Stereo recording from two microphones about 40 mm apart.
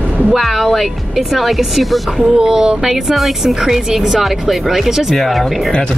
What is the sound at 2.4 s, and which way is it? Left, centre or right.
Speech, centre.